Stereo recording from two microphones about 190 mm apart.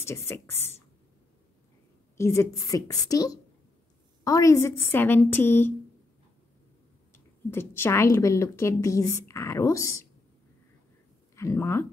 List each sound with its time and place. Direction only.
0.0 s a woman's voice: 15° left (ahead or behind)
2.1 s a woman's voice: 15° left (ahead or behind)
7.1 s a woman's voice: 10° left (ahead or behind)
11.3 s speech: 15° left (ahead or behind)